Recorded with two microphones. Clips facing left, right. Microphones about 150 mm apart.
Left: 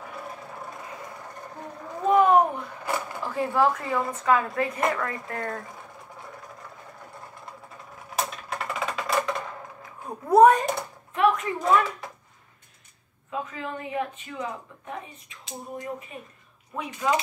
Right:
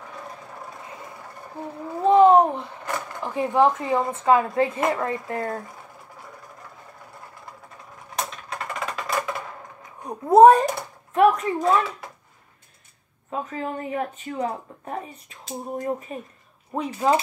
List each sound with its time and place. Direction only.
2.0 s a sound: 25° right (ahead or behind)
2.8 s drawer open or close: 10° left (ahead or behind)
3.2 s speech: 20° right (ahead or behind)
8.2 s typing: centre (ahead or behind)
10.0 s speech: 25° right (ahead or behind)
11.1 s a woman's voice: 35° right (ahead or behind)
13.3 s a woman's voice: 40° right (ahead or behind)